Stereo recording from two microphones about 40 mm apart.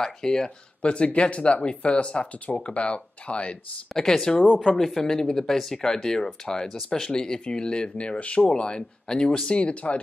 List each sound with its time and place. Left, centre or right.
0.0 s speech: centre
0.8 s speech: left
4.1 s speech: centre
8.2 s speech: left
8.5 s speech: left
9.5 s speech: left